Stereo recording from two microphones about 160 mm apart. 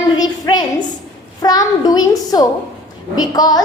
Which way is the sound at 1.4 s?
25° left (ahead or behind).